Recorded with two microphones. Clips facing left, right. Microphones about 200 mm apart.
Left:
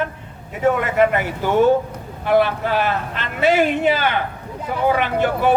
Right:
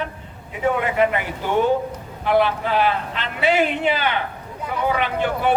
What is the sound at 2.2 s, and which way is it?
Speech, 45° left (ahead or behind).